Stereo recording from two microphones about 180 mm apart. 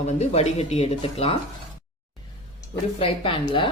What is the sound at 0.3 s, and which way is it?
Speech, 35° left (ahead or behind).